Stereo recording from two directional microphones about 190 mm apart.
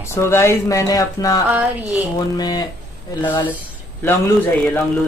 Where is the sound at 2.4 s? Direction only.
20° left (ahead or behind).